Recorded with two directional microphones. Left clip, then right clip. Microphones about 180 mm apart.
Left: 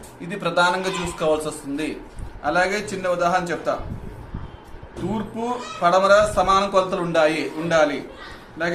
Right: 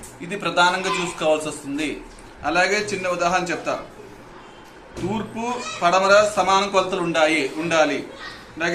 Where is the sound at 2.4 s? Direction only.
45° left (ahead or behind).